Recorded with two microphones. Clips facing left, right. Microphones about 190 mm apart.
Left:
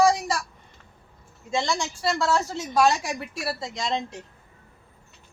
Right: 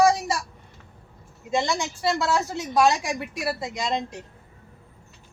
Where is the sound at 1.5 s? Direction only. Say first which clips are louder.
Right 2 dB; 20° right (ahead or behind).